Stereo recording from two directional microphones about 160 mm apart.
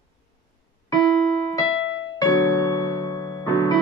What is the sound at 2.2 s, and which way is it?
Music, 25° left (ahead or behind).